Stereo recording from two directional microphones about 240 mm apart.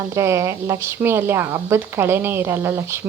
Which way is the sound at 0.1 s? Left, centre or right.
Centre.